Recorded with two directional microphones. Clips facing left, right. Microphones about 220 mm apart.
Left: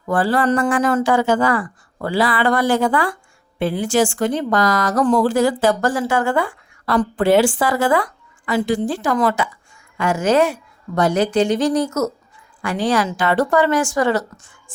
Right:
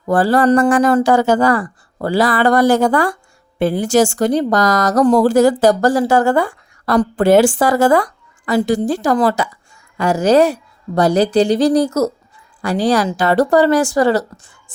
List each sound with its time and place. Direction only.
0.0 s speech: 40° right (ahead or behind)